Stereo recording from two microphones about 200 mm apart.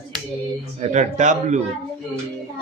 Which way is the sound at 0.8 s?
35° right (ahead or behind).